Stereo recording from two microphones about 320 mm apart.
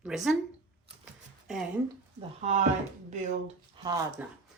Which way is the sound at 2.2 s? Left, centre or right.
Centre.